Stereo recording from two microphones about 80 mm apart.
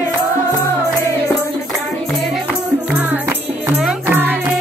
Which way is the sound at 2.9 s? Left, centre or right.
Right.